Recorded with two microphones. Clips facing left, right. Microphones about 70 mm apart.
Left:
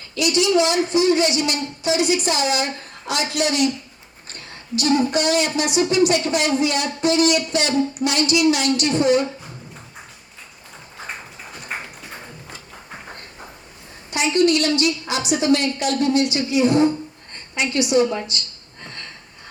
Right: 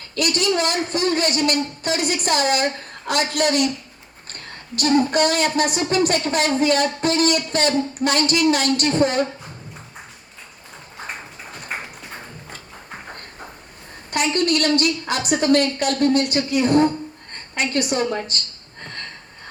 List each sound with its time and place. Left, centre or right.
0.2 s speech: right
14.1 s speech: right